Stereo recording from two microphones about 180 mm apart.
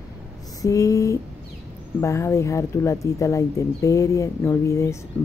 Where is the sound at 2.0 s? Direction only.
15° left (ahead or behind).